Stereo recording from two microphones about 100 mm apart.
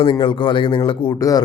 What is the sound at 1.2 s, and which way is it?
Speech, 35° left (ahead or behind).